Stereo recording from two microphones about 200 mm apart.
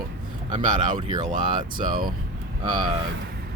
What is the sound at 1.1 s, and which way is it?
Speech, 25° right (ahead or behind).